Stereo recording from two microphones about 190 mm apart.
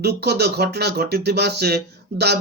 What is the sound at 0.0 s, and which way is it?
Speech, 60° right (ahead or behind).